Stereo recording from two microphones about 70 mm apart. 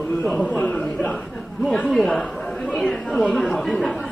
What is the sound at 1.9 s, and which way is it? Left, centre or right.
Speech, centre.